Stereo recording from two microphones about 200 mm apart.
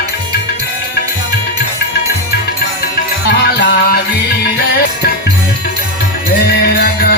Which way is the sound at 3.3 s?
55° left (ahead or behind).